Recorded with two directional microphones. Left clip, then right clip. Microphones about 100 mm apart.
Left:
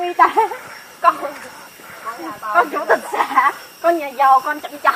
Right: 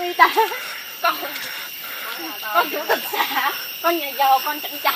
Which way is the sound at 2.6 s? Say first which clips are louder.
Left 6 dB; 10° left (ahead or behind).